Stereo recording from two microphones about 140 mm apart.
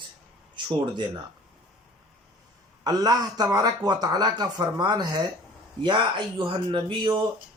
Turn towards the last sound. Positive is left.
turn(degrees=-35)  # may be behind; listen again after turning